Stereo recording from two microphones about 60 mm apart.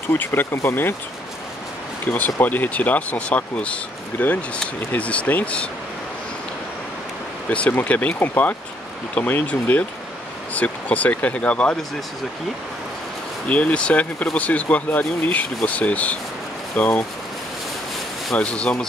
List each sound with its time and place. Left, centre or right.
0.1 s speech: left
2.0 s speech: left
7.4 s speech: left
13.5 s speech: left
18.3 s speech: centre